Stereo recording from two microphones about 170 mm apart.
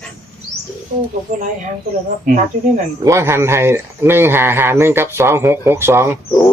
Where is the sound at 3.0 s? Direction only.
15° right (ahead or behind).